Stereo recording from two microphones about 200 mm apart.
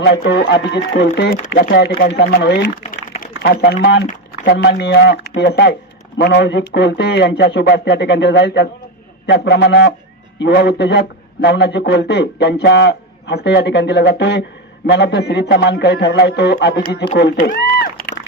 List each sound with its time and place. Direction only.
0.0 s speech: 55° left (ahead or behind)
2.9 s typing: 45° left (ahead or behind)
3.8 s speech: 60° left (ahead or behind)